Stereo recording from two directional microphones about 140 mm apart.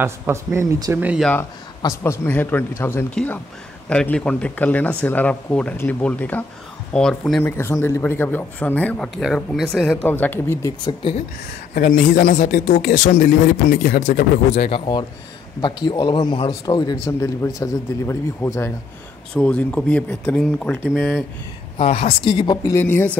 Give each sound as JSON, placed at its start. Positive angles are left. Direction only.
{"t": 0.0, "sound": "speech", "side_deg": -20}
{"t": 0.9, "sound": "speech", "side_deg": -10}
{"t": 1.8, "sound": "speech", "side_deg": 20}
{"t": 7.4, "sound": "speech", "side_deg": 15}
{"t": 10.0, "sound": "speech", "side_deg": 15}
{"t": 10.9, "sound": "a man's voice", "side_deg": 40}
{"t": 11.7, "sound": "speech", "side_deg": 85}
{"t": 14.7, "sound": "a man's voice", "side_deg": 35}
{"t": 19.3, "sound": "speech", "side_deg": 10}
{"t": 21.7, "sound": "a woman's voice", "side_deg": 55}
{"t": 22.2, "sound": "a man's voice", "side_deg": 35}
{"t": 22.7, "sound": "speech", "side_deg": 15}